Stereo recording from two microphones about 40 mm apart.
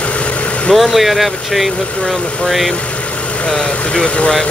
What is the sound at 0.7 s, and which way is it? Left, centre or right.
Speech, centre.